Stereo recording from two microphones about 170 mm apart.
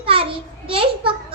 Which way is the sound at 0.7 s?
30° right (ahead or behind).